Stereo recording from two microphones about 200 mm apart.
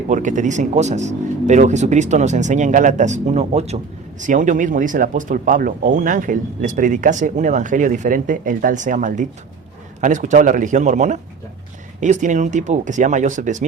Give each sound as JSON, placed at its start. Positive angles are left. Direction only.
{"t": 0.1, "sound": "speech", "side_deg": -40}